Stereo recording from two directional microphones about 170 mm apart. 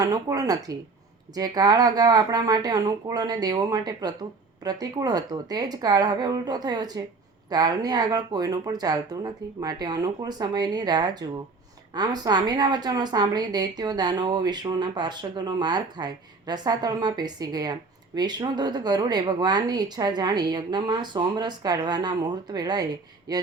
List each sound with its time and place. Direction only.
0.0 s a woman's voice: 20° right (ahead or behind)